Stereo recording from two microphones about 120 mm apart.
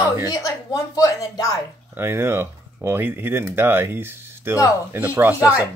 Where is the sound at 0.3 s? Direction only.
30° left (ahead or behind).